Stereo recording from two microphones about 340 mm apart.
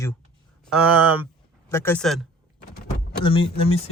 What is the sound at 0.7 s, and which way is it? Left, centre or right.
Speech, centre.